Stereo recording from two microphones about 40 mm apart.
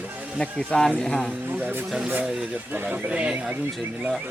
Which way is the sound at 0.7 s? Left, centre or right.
Left.